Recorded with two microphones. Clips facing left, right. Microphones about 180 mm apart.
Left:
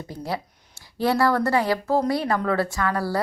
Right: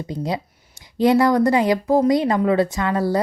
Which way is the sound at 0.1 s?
20° right (ahead or behind).